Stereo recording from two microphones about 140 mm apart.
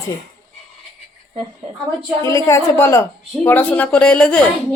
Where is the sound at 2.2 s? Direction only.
20° left (ahead or behind).